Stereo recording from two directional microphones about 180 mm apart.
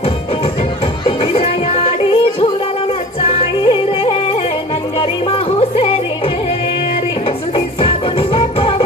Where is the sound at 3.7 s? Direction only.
30° left (ahead or behind).